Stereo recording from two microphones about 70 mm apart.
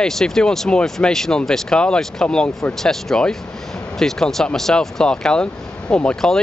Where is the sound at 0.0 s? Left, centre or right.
Centre.